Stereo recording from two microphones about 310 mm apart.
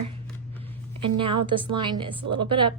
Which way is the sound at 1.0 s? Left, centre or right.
Centre.